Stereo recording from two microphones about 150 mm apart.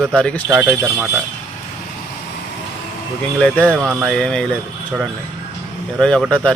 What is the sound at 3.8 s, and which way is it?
Speech, 10° right (ahead or behind).